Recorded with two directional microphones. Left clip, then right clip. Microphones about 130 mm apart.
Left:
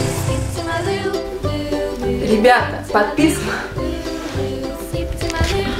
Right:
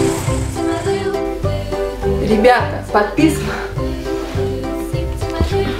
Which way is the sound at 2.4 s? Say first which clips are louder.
Right 1 dB; 20° right (ahead or behind).